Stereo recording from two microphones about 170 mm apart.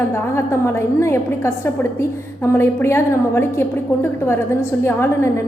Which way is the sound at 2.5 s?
15° left (ahead or behind).